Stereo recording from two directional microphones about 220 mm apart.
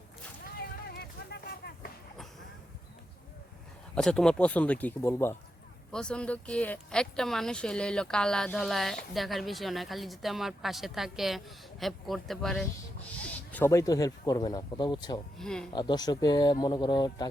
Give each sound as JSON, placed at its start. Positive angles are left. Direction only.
{"t": 0.9, "sound": "a sound", "side_deg": 45}
{"t": 3.9, "sound": "speech", "side_deg": 5}
{"t": 15.4, "sound": "speech", "side_deg": 5}
{"t": 15.7, "sound": "speech", "side_deg": 20}